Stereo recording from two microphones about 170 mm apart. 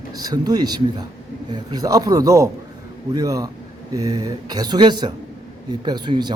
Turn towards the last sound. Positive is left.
turn(degrees=-25)  # may be behind; listen again after turning